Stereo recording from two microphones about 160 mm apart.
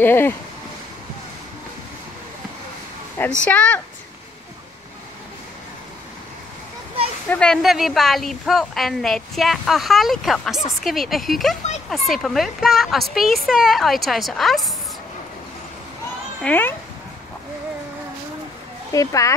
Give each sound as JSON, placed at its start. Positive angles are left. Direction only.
{"t": 0.0, "sound": "speech", "side_deg": 15}
{"t": 3.4, "sound": "speech", "side_deg": 10}
{"t": 7.2, "sound": "a woman's voice", "side_deg": 5}
{"t": 16.4, "sound": "speech", "side_deg": 10}
{"t": 18.9, "sound": "speech", "side_deg": 20}